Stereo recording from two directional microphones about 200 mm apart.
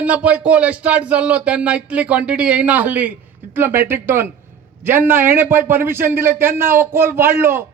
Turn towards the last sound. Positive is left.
turn(degrees=-10)  # may be behind; listen again after turning